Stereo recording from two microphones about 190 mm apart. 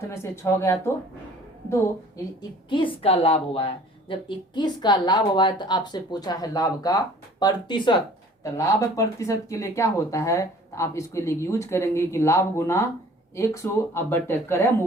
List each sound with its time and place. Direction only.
0.1 s speech: 15° left (ahead or behind)
2.6 s a woman's voice: 25° left (ahead or behind)